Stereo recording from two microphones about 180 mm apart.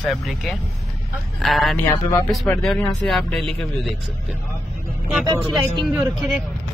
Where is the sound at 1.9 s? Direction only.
15° left (ahead or behind).